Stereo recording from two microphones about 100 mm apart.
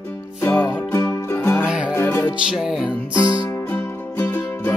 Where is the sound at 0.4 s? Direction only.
20° left (ahead or behind).